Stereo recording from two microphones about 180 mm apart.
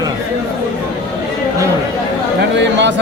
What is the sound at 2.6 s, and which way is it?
Speech, 75° right (ahead or behind).